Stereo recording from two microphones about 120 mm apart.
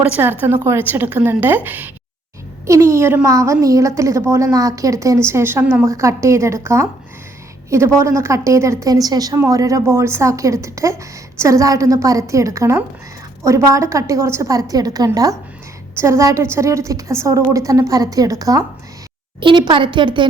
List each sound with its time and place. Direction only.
0.0 s a woman's voice: 15° right (ahead or behind)
19.4 s a woman's voice: 40° right (ahead or behind)